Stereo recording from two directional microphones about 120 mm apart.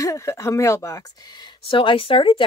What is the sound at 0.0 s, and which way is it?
Speech, 25° left (ahead or behind).